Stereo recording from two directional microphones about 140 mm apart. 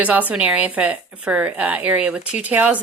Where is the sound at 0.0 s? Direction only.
10° right (ahead or behind).